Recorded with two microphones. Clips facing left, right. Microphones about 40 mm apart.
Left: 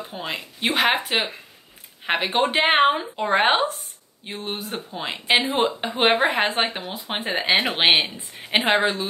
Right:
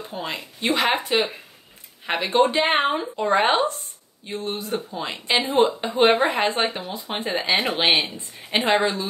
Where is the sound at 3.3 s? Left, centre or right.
Left.